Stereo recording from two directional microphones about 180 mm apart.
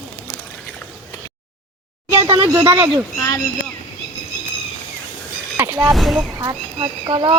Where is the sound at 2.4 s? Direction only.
20° right (ahead or behind).